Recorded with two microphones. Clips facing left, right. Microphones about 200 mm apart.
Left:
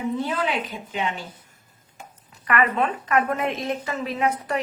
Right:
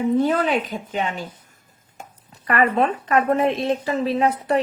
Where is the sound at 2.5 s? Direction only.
35° right (ahead or behind).